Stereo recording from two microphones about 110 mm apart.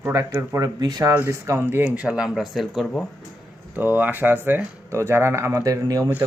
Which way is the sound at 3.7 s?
15° right (ahead or behind).